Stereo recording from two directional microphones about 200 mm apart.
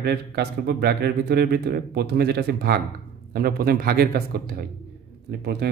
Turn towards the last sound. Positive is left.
turn(degrees=-55)  # may be behind; listen again after turning